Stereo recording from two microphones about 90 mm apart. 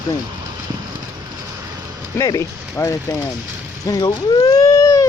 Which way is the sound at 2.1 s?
35° left (ahead or behind).